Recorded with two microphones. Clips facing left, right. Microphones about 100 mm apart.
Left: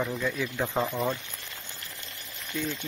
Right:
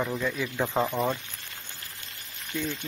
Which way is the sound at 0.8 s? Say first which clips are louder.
Right 2 dB; 30° right (ahead or behind).